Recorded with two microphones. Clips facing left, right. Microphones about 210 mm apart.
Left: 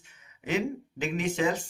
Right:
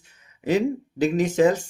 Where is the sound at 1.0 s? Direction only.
40° right (ahead or behind).